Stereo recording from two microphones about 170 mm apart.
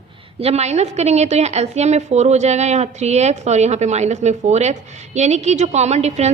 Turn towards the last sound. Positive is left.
turn(degrees=-40)  # may be behind; listen again after turning